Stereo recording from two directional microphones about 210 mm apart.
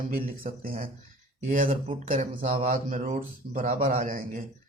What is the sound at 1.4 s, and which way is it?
Speech, 30° right (ahead or behind).